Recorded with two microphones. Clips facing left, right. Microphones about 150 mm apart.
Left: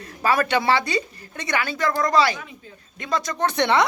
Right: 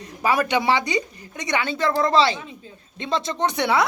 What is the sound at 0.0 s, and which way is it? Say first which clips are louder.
A woman's voice: even; 15° right (ahead or behind).